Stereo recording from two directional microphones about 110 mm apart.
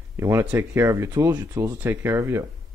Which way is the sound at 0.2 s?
20° right (ahead or behind).